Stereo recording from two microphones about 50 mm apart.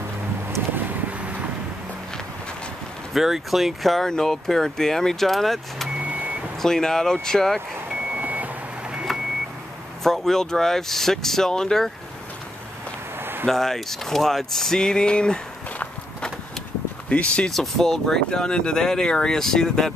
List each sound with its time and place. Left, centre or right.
0.8 s vehicle: right
3.1 s speech: centre
8.1 s vehicle: right
10.0 s speech: centre
13.2 s a sound: right
13.5 s speech: centre
17.1 s speech: left
17.5 s speech: centre